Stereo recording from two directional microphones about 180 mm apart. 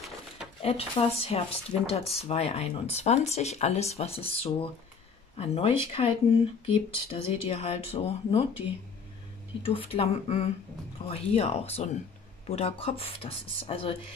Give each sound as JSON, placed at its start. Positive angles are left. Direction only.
{"t": 0.6, "sound": "speech", "side_deg": 35}
{"t": 9.8, "sound": "speech", "side_deg": 30}